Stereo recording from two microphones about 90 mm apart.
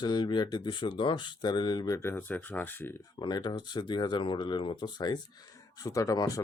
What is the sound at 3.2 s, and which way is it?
Speech, 50° left (ahead or behind).